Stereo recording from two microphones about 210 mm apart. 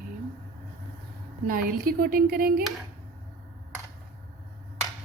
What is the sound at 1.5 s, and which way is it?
Speech, 40° right (ahead or behind).